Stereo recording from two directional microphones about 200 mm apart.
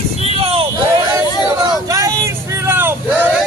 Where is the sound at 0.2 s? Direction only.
30° right (ahead or behind).